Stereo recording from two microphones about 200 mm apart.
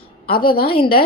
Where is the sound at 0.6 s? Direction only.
25° left (ahead or behind).